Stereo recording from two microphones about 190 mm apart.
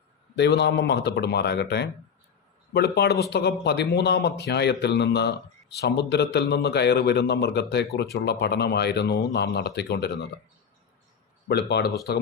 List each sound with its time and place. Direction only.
0.3 s a man's voice: 65° left (ahead or behind)
11.4 s a man's voice: 60° left (ahead or behind)